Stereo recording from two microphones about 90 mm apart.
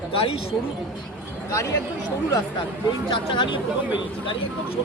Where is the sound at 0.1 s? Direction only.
90° left.